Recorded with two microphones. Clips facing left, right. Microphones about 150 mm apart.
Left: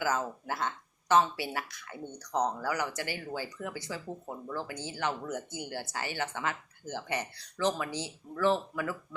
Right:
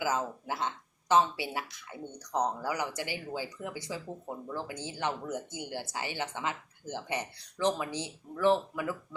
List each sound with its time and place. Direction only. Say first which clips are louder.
0.0 s speech: even; 15° right (ahead or behind)